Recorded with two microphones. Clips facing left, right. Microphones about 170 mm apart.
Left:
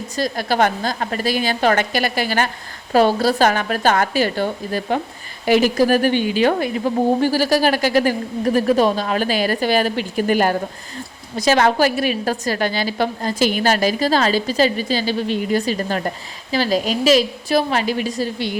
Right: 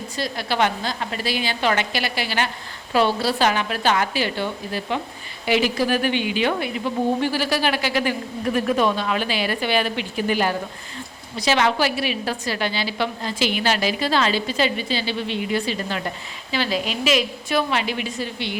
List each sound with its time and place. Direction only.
0.2 s a woman's voice: 45° left (ahead or behind)